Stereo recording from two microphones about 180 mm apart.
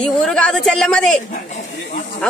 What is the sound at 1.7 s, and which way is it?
Speech, 55° left (ahead or behind).